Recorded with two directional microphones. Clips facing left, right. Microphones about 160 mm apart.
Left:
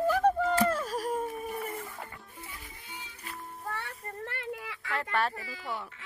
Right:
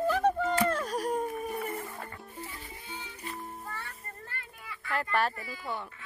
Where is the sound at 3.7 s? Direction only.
75° left (ahead or behind).